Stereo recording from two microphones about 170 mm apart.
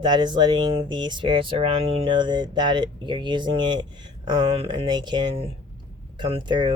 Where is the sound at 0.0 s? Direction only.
25° right (ahead or behind).